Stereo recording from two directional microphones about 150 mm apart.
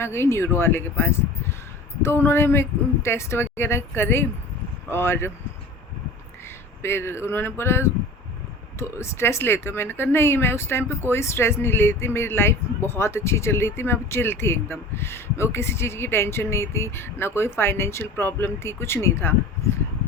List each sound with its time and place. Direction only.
0.0 s speech: 15° left (ahead or behind)
6.8 s speech: 15° left (ahead or behind)